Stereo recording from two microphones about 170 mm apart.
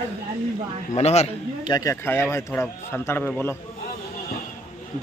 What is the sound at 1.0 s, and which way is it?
Speech, 40° left (ahead or behind).